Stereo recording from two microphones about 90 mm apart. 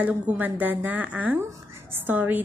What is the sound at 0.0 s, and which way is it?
A woman's voice, 20° right (ahead or behind).